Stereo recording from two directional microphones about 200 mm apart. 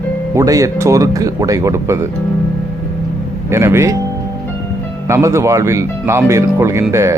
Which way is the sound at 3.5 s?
15° right (ahead or behind).